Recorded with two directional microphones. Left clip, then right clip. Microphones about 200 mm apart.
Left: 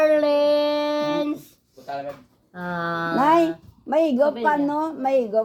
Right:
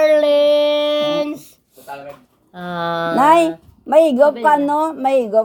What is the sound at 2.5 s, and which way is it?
Speech, 40° right (ahead or behind).